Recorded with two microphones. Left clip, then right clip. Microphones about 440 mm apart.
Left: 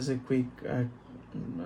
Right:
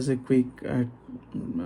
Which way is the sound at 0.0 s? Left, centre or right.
Centre.